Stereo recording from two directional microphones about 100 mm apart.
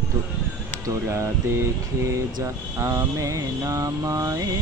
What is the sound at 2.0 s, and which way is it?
Mantra, 30° right (ahead or behind).